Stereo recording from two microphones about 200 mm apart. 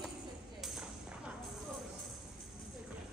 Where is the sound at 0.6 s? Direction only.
Centre (ahead or behind).